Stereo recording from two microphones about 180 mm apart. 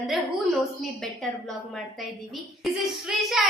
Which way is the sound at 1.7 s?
Centre (ahead or behind).